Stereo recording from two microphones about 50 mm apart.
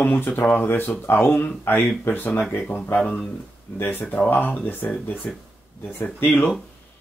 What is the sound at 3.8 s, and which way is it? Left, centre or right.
Speech, left.